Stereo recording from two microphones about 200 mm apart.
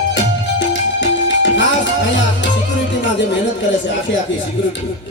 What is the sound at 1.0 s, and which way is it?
Music, 65° left (ahead or behind).